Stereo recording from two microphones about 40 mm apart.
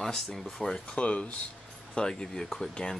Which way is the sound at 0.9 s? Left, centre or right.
Left.